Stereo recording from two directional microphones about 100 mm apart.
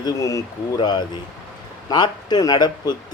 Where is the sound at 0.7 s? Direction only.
50° left (ahead or behind).